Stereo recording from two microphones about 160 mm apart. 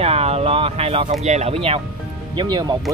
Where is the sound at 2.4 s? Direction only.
25° right (ahead or behind).